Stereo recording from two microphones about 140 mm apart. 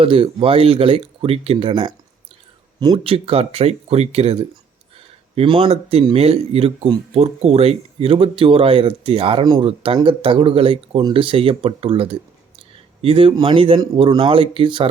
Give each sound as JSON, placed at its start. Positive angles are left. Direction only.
{"t": 0.0, "sound": "speech", "side_deg": -40}
{"t": 9.4, "sound": "speech", "side_deg": -30}
{"t": 9.6, "sound": "speech", "side_deg": -40}